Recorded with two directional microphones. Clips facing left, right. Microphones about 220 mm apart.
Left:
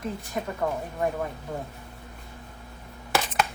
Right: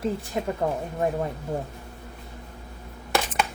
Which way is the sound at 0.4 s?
25° right (ahead or behind).